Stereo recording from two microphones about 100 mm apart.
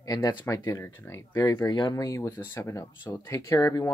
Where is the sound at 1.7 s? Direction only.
45° left (ahead or behind).